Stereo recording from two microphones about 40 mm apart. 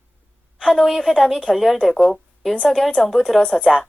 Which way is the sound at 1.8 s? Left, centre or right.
Left.